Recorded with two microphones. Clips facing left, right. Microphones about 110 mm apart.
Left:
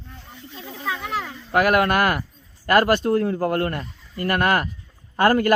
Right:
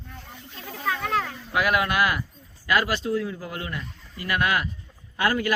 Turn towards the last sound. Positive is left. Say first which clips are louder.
# left 7 dB
turn(degrees=50)  # may be behind; listen again after turning